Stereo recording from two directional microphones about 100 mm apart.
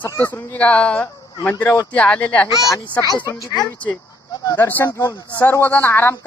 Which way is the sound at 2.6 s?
35° left (ahead or behind).